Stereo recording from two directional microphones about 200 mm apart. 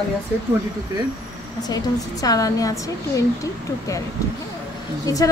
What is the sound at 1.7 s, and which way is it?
A woman's voice, 20° left (ahead or behind).